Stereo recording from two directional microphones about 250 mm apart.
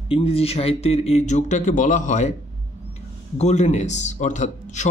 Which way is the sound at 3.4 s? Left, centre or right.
Left.